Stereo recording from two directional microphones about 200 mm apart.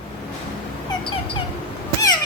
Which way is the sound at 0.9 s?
25° left (ahead or behind).